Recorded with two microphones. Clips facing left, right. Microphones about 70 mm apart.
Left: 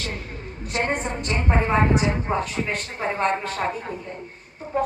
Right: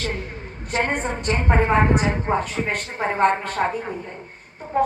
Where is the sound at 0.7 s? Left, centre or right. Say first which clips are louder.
Right 2 dB; right.